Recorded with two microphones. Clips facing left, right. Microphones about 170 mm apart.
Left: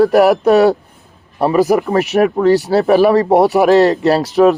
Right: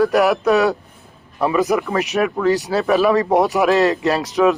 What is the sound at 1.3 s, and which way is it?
Speech, 35° left (ahead or behind).